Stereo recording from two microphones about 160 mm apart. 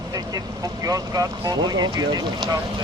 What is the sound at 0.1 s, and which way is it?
Speech, 25° right (ahead or behind).